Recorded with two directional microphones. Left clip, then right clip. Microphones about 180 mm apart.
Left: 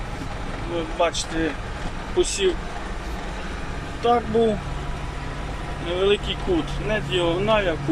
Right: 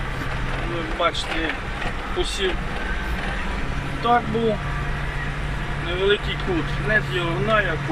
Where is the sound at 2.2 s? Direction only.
5° left (ahead or behind).